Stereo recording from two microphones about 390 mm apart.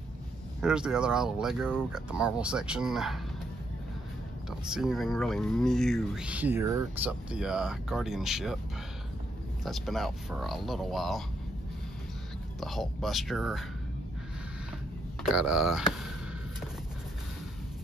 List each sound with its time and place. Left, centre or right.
0.6 s speech: centre
4.5 s speech: centre
9.7 s speech: centre
12.5 s speech: centre
15.2 s speech: centre